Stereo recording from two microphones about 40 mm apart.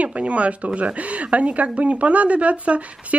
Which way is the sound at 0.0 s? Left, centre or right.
Right.